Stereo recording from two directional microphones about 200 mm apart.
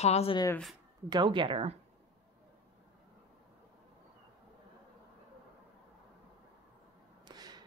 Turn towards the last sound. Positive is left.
turn(degrees=-20)  # may be behind; listen again after turning